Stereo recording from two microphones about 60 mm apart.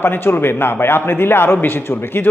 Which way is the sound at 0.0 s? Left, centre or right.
Left.